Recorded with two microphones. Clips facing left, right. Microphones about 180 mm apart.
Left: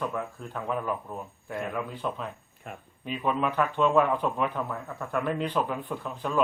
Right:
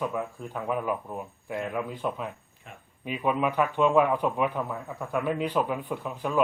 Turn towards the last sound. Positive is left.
turn(degrees=-10)  # may be behind; listen again after turning